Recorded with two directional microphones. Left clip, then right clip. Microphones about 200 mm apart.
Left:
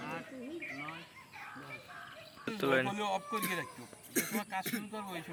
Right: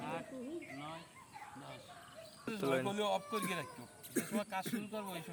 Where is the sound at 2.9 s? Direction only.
45° right (ahead or behind).